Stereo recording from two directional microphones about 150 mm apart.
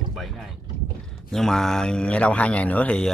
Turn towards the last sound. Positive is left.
turn(degrees=5)  # may be behind; listen again after turning